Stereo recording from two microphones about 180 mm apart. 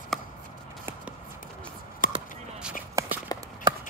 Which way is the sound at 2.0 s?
50° left (ahead or behind).